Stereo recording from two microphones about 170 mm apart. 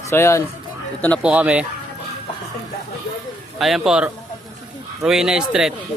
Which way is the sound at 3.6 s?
Centre (ahead or behind).